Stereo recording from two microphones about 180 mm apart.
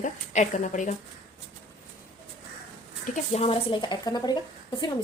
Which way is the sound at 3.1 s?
35° left (ahead or behind).